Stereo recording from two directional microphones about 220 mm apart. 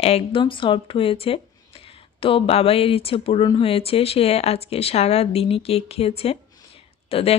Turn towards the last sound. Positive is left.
turn(degrees=25)  # may be behind; listen again after turning